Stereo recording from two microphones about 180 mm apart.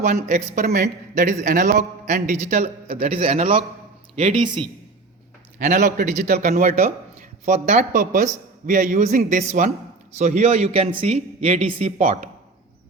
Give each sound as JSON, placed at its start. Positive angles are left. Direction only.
{"t": 0.0, "sound": "a man's voice", "side_deg": -40}
{"t": 5.5, "sound": "a man's voice", "side_deg": -45}